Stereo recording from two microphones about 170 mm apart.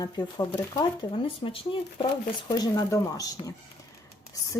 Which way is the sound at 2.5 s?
20° left (ahead or behind).